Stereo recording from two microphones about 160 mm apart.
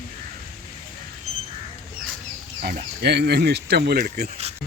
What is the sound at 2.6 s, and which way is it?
Speech, 85° right.